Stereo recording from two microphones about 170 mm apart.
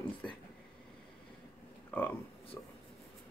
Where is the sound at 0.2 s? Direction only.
10° left (ahead or behind).